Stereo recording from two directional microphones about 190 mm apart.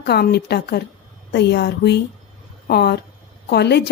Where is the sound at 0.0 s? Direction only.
60° left (ahead or behind).